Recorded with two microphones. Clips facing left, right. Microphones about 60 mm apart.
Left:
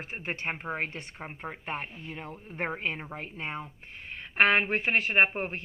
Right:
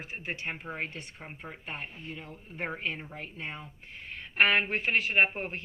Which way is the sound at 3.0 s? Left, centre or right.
Left.